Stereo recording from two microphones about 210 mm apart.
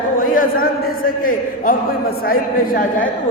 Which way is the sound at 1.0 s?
40° left (ahead or behind).